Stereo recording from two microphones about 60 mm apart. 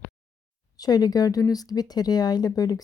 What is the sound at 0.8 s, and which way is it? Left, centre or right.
Speech, left.